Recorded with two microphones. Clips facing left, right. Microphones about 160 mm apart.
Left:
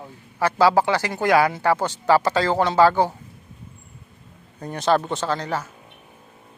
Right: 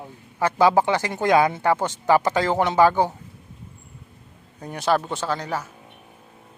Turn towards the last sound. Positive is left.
turn(degrees=-10)  # may be behind; listen again after turning